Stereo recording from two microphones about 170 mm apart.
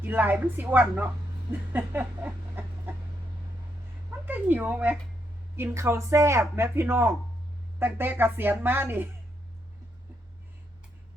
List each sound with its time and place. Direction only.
0.0 s speech: 10° right (ahead or behind)
4.3 s speech: 10° right (ahead or behind)